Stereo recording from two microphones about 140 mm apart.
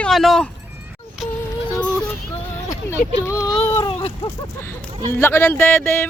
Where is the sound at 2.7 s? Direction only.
20° left (ahead or behind).